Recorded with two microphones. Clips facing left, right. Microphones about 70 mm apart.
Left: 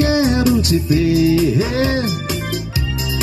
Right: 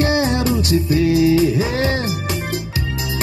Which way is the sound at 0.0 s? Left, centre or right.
Right.